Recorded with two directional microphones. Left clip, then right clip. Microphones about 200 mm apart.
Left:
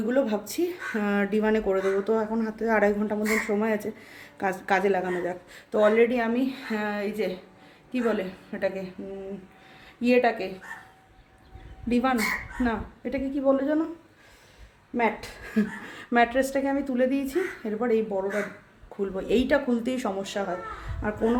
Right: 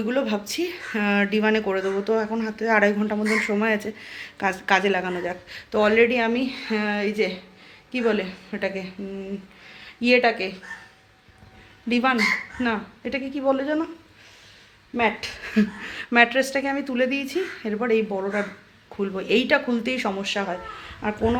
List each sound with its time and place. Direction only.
0.1 s speech: 5° left (ahead or behind)
6.1 s a woman's voice: 20° right (ahead or behind)
11.9 s speech: 15° right (ahead or behind)
14.9 s speech: 10° right (ahead or behind)
19.1 s speech: 10° right (ahead or behind)